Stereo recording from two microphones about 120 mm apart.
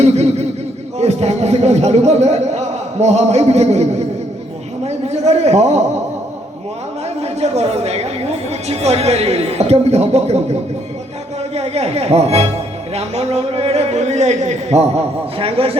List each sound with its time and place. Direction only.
0.0 s a sound: 65° right (ahead or behind)
0.9 s a woman's voice: 65° right (ahead or behind)
7.2 s a woman's voice: 65° right (ahead or behind)